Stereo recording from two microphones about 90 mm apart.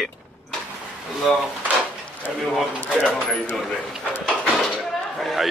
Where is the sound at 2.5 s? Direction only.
Centre (ahead or behind).